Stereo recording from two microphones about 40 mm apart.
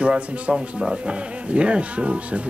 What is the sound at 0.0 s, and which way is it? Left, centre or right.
Speech, right.